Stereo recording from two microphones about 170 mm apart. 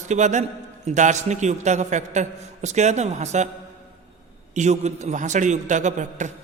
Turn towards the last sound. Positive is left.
turn(degrees=-45)  # may be behind; listen again after turning